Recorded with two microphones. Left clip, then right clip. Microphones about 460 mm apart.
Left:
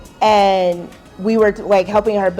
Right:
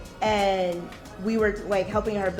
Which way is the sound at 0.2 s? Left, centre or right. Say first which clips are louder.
Left 11 dB; centre.